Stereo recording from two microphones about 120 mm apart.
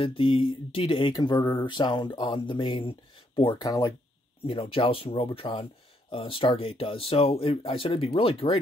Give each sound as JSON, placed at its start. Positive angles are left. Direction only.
{"t": 0.0, "sound": "speech", "side_deg": 50}
{"t": 3.6, "sound": "speech", "side_deg": 30}
{"t": 4.5, "sound": "speech", "side_deg": 50}